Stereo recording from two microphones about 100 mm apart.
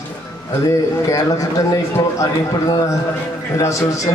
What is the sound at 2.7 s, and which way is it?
A man's voice, 40° left (ahead or behind).